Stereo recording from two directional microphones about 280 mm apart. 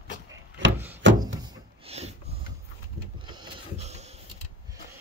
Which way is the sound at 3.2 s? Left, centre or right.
Centre.